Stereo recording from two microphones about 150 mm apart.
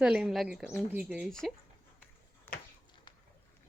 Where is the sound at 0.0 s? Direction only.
5° right (ahead or behind).